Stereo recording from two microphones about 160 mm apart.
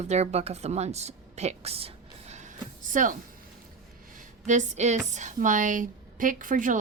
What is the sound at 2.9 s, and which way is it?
Speech, 55° right (ahead or behind).